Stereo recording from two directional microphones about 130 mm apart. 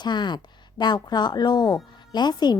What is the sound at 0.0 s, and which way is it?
A woman's voice, 35° left (ahead or behind).